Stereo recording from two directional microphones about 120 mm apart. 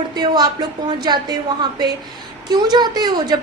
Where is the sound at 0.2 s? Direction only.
35° right (ahead or behind).